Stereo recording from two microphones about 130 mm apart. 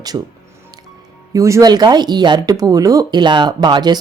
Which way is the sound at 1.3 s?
25° right (ahead or behind).